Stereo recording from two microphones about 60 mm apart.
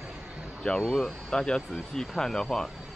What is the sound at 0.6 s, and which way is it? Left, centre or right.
Speech, centre.